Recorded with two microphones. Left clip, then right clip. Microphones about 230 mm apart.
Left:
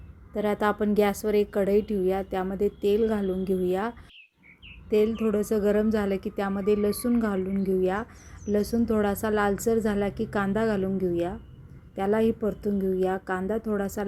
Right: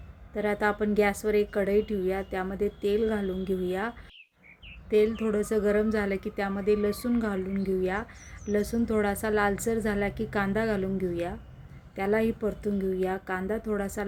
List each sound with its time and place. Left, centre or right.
0.3 s a woman's voice: centre